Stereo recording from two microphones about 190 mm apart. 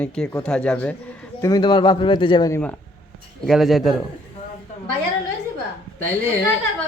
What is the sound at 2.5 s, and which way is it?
A man's voice, 5° left (ahead or behind).